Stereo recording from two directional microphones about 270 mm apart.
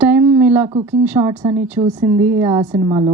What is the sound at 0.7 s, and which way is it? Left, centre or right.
Speech, centre.